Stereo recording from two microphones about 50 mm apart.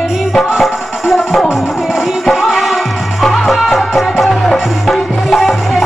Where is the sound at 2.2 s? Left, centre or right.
Centre.